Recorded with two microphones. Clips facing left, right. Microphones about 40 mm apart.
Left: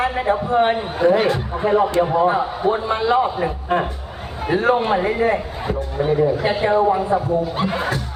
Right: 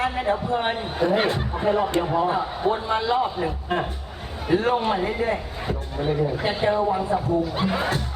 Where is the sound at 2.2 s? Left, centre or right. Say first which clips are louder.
Left 5 dB; left.